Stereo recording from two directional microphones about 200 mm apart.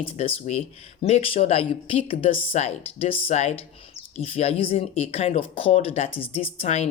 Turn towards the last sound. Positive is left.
turn(degrees=35)  # may be behind; listen again after turning